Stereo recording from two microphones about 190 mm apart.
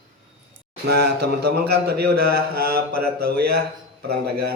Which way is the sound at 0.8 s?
60° right (ahead or behind).